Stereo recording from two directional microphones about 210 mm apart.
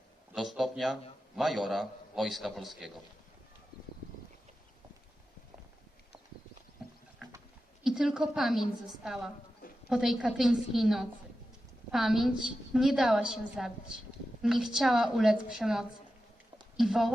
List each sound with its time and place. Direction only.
0.3 s a sound: centre (ahead or behind)
1.4 s a man's voice: centre (ahead or behind)
7.9 s a man's voice: 5° right (ahead or behind)